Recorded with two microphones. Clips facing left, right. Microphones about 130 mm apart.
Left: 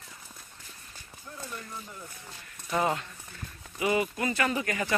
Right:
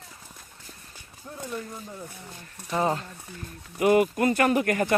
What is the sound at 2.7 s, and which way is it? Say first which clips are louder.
Speech: right 2 dB; 35° right (ahead or behind).